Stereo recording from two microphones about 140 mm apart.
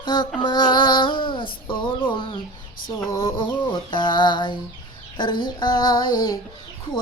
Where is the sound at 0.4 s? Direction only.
35° left (ahead or behind).